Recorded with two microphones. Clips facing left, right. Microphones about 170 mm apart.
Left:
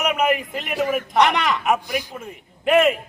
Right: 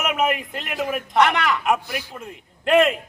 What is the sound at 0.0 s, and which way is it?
A man's voice, centre (ahead or behind).